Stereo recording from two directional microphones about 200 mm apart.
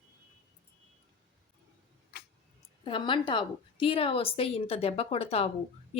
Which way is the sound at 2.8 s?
25° left (ahead or behind).